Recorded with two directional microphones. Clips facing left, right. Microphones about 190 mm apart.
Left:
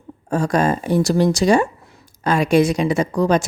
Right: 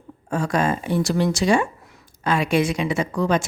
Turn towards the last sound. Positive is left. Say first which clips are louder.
# left 4 dB
turn(degrees=40)  # may be behind; listen again after turning